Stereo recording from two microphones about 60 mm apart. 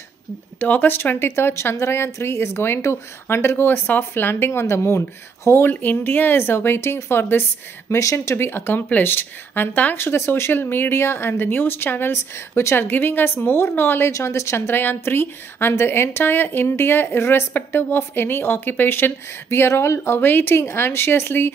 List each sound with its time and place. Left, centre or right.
0.6 s speech: left
4.5 s speech: left
8.0 s a woman's voice: left
8.4 s speech: left
9.9 s speech: left
14.1 s a woman's voice: left
14.7 s speech: left